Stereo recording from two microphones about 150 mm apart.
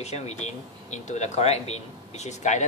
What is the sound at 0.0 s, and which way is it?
Speech, 45° left (ahead or behind).